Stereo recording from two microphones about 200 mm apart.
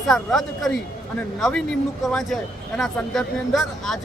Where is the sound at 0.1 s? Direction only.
Centre (ahead or behind).